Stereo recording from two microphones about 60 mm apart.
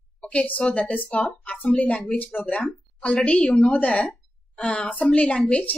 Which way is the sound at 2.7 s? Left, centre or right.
Centre.